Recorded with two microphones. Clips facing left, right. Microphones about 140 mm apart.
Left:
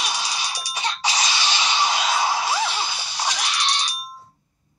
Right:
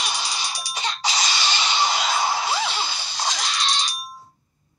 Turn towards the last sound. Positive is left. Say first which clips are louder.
# even
turn(degrees=15)  # may be behind; listen again after turning